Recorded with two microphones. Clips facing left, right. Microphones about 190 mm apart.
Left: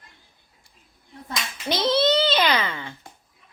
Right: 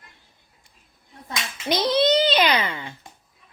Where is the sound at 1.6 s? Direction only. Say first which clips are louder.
Right 1 dB; 15° right (ahead or behind).